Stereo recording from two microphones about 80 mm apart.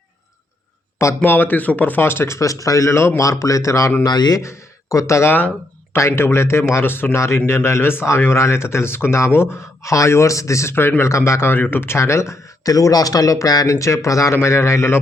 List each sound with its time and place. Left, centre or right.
1.2 s speech: left
4.0 s speech: left
4.4 s speech: left
9.8 s speech: left